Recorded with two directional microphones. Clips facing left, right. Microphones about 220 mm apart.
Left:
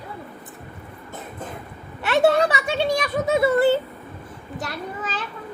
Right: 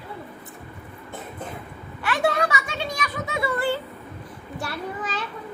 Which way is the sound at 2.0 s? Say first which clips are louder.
Left 6 dB; 25° left (ahead or behind).